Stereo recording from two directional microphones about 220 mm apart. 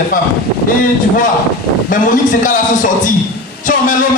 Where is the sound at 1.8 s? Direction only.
35° left (ahead or behind).